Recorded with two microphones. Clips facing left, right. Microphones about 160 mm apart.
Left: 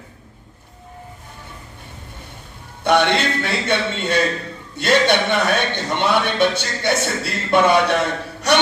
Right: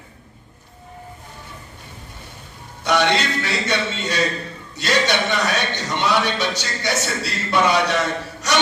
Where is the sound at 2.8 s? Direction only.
55° left (ahead or behind).